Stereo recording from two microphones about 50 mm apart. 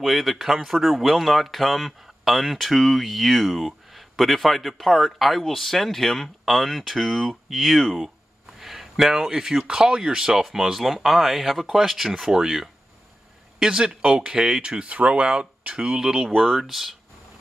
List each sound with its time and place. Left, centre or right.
0.0 s speech: centre